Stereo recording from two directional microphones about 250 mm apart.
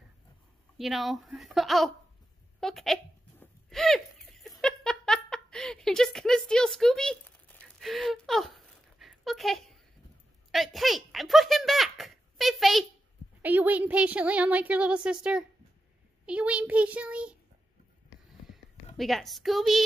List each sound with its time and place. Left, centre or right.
0.7 s a woman's voice: centre
2.6 s a sound: centre
13.4 s a woman's voice: centre
18.9 s a woman's voice: centre